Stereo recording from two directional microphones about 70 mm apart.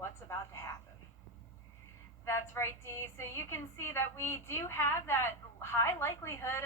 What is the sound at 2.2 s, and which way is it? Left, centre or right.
A woman's voice, left.